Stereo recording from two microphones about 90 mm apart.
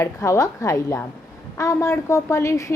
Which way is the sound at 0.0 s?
30° left (ahead or behind).